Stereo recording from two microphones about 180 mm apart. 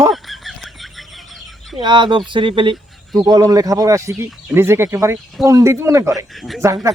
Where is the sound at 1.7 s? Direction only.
25° right (ahead or behind).